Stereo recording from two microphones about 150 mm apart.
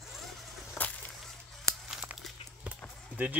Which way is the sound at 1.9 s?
5° right (ahead or behind).